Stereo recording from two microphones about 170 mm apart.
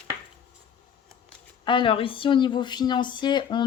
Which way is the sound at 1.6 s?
30° left (ahead or behind).